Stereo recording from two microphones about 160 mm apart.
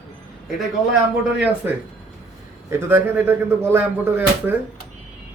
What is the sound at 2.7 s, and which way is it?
Speech, 15° right (ahead or behind).